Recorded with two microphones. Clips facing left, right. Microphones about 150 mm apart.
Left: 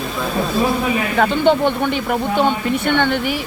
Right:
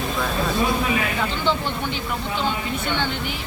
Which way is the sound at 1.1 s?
60° left (ahead or behind).